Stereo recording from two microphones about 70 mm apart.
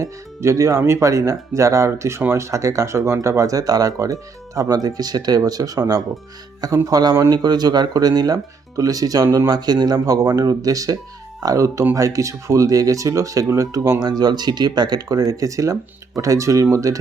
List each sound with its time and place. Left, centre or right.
0.0 s speech: right
7.3 s speech: right
9.5 s speech: right
14.0 s speech: right